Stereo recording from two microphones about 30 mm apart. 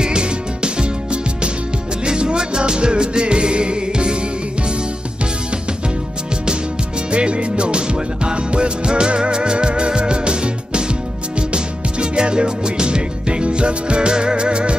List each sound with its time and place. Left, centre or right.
0.0 s music: right
7.1 s music: right